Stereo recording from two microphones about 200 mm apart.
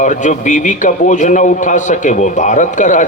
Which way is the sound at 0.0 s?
40° left (ahead or behind).